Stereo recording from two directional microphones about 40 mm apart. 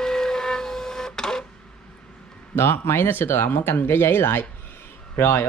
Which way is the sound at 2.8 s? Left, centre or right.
Left.